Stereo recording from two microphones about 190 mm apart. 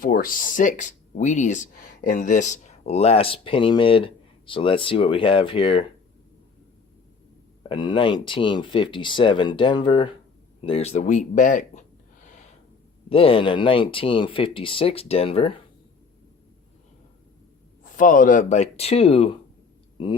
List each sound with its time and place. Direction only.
0.0 s speech: 45° left (ahead or behind); by 5.8 s 30° left (ahead or behind)
7.7 s speech: 25° left (ahead or behind); by 11.9 s 40° left (ahead or behind)
13.1 s speech: 30° left (ahead or behind)
17.9 s speech: 45° left (ahead or behind)